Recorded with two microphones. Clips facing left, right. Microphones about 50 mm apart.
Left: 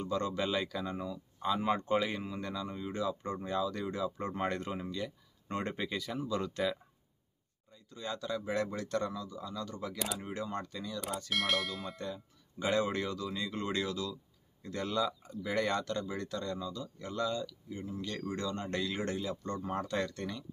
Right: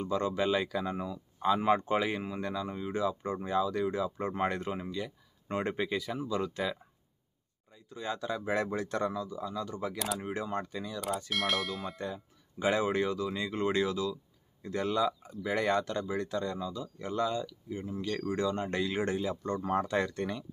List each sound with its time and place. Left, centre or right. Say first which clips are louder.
0.0 s speech: right 3 dB; centre
7.7 s speech: right 3 dB; centre
11.2 s speech: left 1 dB; centre
12.0 s speech: right 3 dB; centre